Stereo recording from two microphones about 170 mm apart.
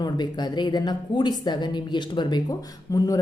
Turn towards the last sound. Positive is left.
turn(degrees=20)  # may be behind; listen again after turning